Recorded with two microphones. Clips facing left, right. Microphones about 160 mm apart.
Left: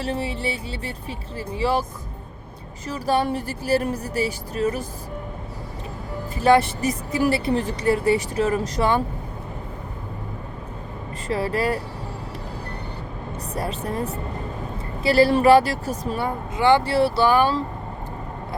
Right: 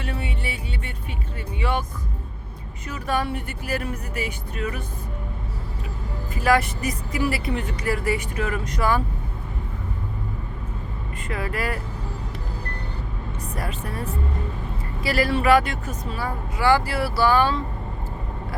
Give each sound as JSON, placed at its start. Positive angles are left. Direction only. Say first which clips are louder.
{"t": 0.0, "sound": "music", "louder": "left 5 dB", "side_deg": 30}
{"t": 1.4, "sound": "speech", "louder": "left 4 dB", "side_deg": 30}
{"t": 2.8, "sound": "speech", "louder": "left 4 dB", "side_deg": 35}
{"t": 6.3, "sound": "speech", "louder": "left 4 dB", "side_deg": 30}
{"t": 11.3, "sound": "speech", "louder": "left 5 dB", "side_deg": 30}
{"t": 13.6, "sound": "speech", "louder": "left 5 dB", "side_deg": 35}
{"t": 15.0, "sound": "speech", "louder": "left 5 dB", "side_deg": 30}